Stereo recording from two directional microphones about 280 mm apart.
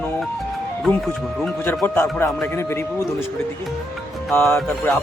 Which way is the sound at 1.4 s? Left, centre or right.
Centre.